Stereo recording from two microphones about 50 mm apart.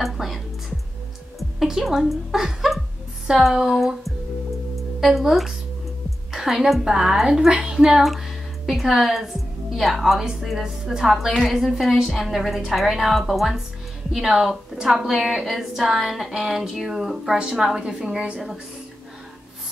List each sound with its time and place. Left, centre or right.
0.0 s music: centre
1.6 s a sound: centre
3.3 s speech: centre
8.0 s speech: centre
14.1 s speech: centre